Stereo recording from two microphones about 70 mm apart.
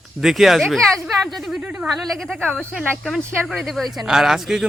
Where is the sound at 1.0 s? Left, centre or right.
Centre.